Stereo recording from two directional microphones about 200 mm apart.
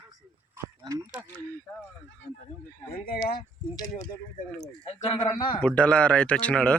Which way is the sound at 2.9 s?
50° left (ahead or behind).